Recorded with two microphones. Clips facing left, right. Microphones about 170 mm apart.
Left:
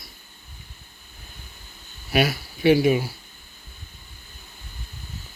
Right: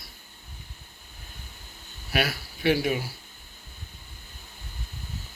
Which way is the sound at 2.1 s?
15° left (ahead or behind).